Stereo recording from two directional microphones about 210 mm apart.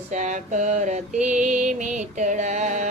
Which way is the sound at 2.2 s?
35° right (ahead or behind).